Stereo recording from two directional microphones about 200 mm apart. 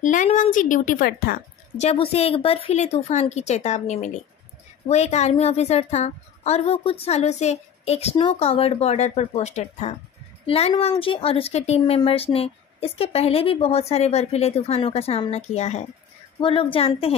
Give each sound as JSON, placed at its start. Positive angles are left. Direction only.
{"t": 0.0, "sound": "a woman's voice", "side_deg": 40}
{"t": 1.8, "sound": "a woman's voice", "side_deg": 30}